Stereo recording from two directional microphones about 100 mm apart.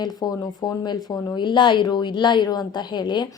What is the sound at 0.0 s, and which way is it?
A woman's voice, 45° left (ahead or behind).